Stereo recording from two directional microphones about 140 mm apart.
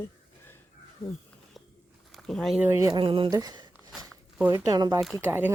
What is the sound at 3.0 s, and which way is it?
Speech, 40° right (ahead or behind).